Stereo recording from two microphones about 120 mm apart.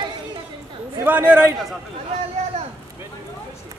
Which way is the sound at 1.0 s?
15° right (ahead or behind).